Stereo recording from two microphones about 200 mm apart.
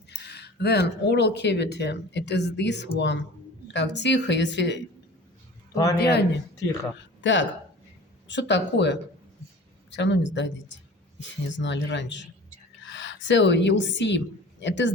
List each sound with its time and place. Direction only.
0.1 s speech: 55° left (ahead or behind)
5.7 s a man's voice: 15° left (ahead or behind)
6.0 s a woman's voice: 55° left (ahead or behind)